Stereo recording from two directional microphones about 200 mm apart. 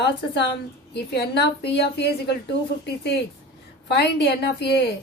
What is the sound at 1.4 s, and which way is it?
Speech, 55° left (ahead or behind).